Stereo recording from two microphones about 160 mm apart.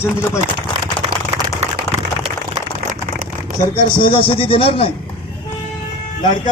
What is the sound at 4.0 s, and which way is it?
Speech, 35° left (ahead or behind).